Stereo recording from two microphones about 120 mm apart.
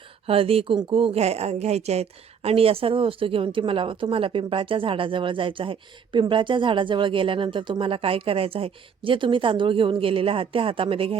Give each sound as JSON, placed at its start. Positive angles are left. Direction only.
{"t": 0.3, "sound": "a woman's voice", "side_deg": -50}